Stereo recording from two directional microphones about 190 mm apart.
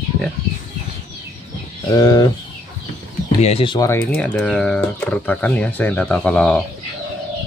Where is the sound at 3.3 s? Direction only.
30° left (ahead or behind).